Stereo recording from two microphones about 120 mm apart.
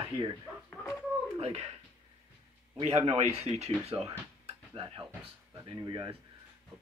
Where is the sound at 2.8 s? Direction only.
55° right (ahead or behind).